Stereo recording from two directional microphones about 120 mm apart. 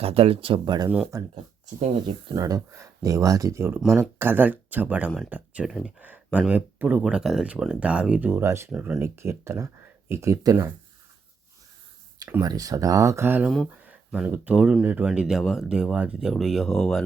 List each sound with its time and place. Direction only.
0.0 s speech: 55° right (ahead or behind); by 1.3 s 30° right (ahead or behind)
2.3 s speech: 30° right (ahead or behind)
8.7 s speech: 10° right (ahead or behind)
12.4 s speech: 30° right (ahead or behind); by 17.0 s 5° left (ahead or behind)